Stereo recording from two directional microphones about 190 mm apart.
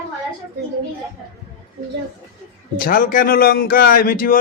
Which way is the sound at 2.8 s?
50° left (ahead or behind).